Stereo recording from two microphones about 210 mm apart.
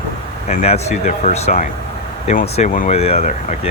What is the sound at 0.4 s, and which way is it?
Speech, 30° left (ahead or behind).